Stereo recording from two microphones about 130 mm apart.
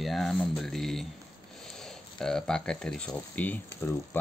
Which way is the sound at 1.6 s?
5° left (ahead or behind).